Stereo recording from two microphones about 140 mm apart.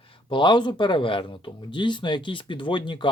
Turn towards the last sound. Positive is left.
turn(degrees=35)  # may be behind; listen again after turning